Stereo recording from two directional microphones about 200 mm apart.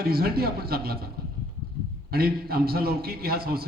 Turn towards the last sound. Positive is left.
turn(degrees=-50)  # may be behind; listen again after turning